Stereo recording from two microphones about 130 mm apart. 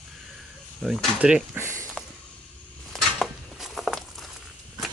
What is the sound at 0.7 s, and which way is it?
Speech, centre (ahead or behind).